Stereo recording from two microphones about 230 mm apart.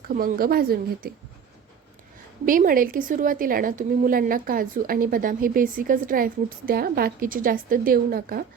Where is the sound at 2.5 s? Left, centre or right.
Right.